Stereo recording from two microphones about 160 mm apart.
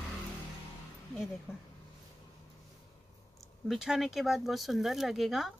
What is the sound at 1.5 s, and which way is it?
Speech, 15° left (ahead or behind).